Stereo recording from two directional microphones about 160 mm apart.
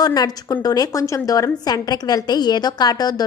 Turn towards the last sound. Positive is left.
turn(degrees=25)  # may be behind; listen again after turning